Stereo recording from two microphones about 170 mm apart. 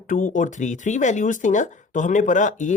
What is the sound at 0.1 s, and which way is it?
Speech, 50° left (ahead or behind).